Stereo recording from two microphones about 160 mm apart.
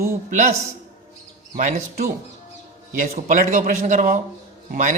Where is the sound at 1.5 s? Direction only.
50° right (ahead or behind).